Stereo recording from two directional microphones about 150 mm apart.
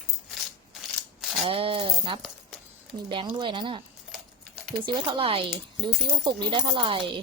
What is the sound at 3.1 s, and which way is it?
Speech, 35° right (ahead or behind).